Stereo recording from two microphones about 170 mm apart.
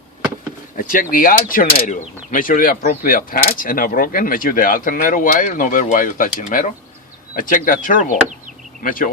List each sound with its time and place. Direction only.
0.8 s speech: 55° left (ahead or behind)